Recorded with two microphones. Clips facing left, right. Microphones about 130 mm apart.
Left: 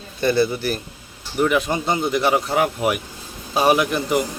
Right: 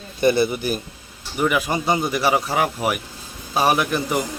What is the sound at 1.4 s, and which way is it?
Speech, 5° right (ahead or behind).